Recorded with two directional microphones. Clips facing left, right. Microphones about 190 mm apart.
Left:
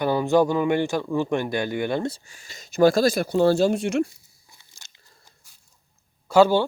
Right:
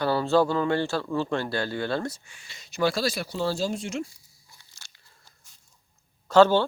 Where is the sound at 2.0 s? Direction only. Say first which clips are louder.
Left 5 dB; 35° left (ahead or behind); by 4.1 s 65° left (ahead or behind).